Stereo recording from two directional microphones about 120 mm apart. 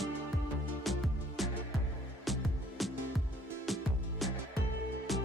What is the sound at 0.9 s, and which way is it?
Music, centre (ahead or behind).